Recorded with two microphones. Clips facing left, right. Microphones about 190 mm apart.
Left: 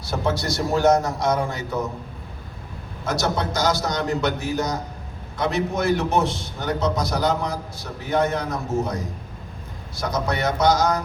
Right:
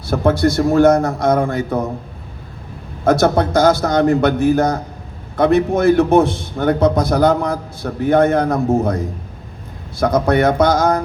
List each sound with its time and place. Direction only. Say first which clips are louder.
0.1 s a man's voice: right 9 dB; 55° right (ahead or behind)
3.0 s a man's voice: right 10 dB; 55° right (ahead or behind)